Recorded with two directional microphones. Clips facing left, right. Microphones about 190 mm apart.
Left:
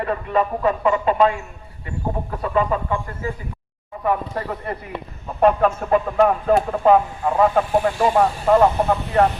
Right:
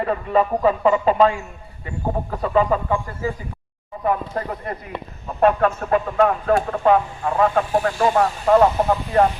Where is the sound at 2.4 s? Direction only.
35° right (ahead or behind).